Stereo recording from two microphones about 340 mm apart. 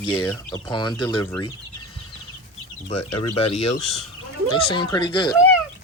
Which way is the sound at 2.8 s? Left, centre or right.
Centre.